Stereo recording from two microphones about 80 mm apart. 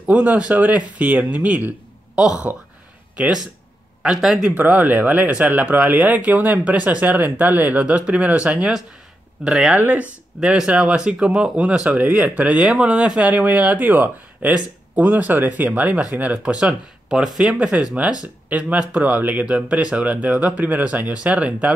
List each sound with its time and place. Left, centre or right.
0.0 s speech: centre
4.5 s speech: right